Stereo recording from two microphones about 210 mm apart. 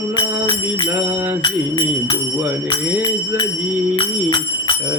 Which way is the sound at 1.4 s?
25° left (ahead or behind).